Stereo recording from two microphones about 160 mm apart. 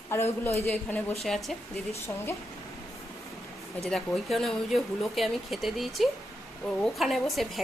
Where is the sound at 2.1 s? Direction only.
15° left (ahead or behind).